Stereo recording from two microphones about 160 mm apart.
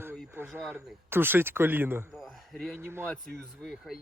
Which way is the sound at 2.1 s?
Centre (ahead or behind).